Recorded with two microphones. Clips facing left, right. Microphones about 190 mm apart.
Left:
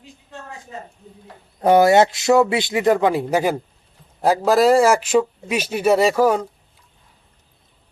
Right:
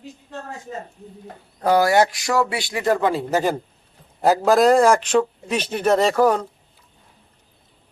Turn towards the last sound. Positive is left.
turn(degrees=10)  # may be behind; listen again after turning